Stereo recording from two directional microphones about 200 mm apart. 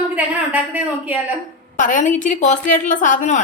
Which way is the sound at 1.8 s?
40° left (ahead or behind).